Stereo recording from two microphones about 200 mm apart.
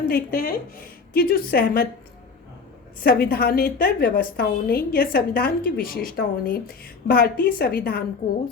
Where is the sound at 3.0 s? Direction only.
50° left (ahead or behind).